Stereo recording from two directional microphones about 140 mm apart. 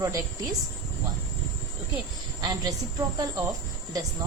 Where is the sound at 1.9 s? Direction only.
30° right (ahead or behind).